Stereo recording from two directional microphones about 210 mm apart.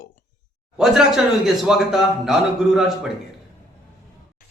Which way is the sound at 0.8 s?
Centre (ahead or behind).